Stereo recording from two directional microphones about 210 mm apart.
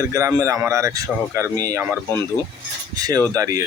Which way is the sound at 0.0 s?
15° right (ahead or behind).